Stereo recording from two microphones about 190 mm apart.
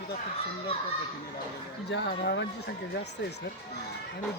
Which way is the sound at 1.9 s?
70° left (ahead or behind).